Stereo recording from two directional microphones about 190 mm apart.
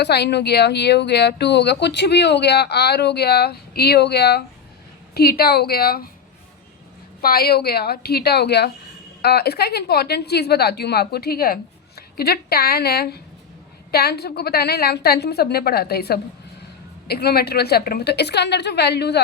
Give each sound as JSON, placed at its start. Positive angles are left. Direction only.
{"t": 0.0, "sound": "speech", "side_deg": 60}
{"t": 7.2, "sound": "speech", "side_deg": 50}